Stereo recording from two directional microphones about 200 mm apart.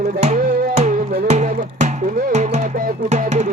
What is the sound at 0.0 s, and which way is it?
Music, 35° right (ahead or behind).